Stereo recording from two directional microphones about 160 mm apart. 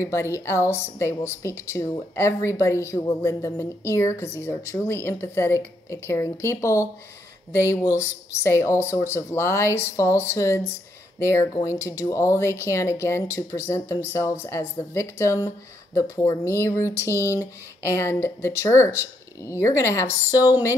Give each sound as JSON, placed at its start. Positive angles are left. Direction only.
{"t": 0.0, "sound": "speech", "side_deg": 20}